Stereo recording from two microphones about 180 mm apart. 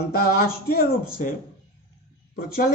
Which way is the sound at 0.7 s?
55° left (ahead or behind).